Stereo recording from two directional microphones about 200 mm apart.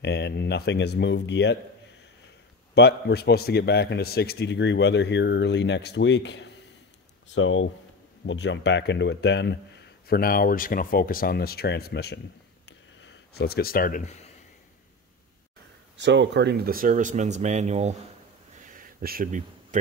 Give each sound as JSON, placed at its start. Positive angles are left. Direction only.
{"t": 0.0, "sound": "a man's voice", "side_deg": 55}
{"t": 2.7, "sound": "a man's voice", "side_deg": 55}
{"t": 7.3, "sound": "speech", "side_deg": 80}
{"t": 8.3, "sound": "speech", "side_deg": 65}
{"t": 12.6, "sound": "a sound", "side_deg": 60}
{"t": 16.0, "sound": "speech", "side_deg": -65}
{"t": 18.7, "sound": "a sound", "side_deg": -45}